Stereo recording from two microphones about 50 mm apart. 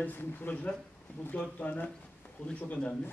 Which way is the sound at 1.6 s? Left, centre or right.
Left.